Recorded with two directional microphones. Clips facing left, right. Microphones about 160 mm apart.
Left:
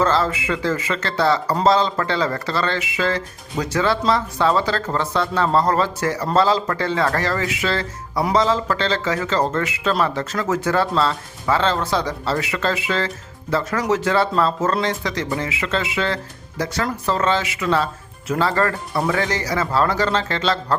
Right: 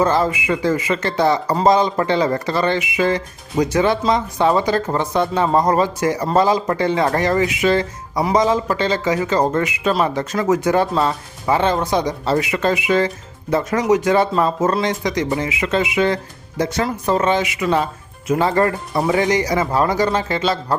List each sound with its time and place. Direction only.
0.0 s speech: 15° right (ahead or behind)